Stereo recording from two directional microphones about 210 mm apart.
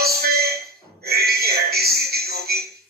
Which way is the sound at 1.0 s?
50° right (ahead or behind).